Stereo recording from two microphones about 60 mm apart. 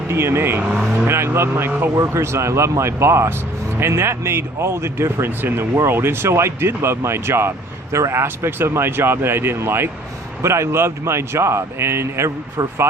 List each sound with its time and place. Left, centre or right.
0.1 s speech: right
7.9 s speech: right
8.2 s speech: right